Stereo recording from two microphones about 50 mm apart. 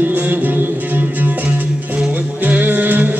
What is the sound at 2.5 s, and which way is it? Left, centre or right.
Music, right.